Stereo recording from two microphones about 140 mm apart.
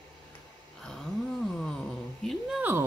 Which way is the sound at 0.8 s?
5° left (ahead or behind).